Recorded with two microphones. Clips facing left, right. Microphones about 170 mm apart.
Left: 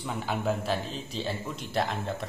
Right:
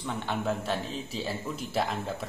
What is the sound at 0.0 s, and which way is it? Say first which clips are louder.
A man's voice: left 1 dB; centre (ahead or behind).